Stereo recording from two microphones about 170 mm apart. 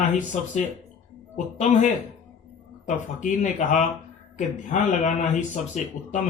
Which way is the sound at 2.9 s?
45° left (ahead or behind).